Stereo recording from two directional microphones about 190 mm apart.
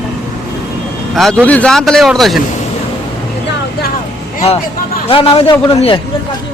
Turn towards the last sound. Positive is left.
turn(degrees=30)  # may be behind; listen again after turning